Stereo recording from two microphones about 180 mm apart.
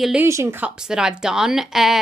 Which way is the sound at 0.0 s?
10° right (ahead or behind).